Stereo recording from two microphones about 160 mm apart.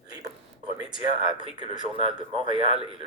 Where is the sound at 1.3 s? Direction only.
30° right (ahead or behind).